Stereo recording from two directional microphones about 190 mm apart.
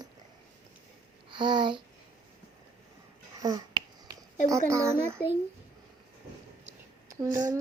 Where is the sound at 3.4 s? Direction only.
20° right (ahead or behind).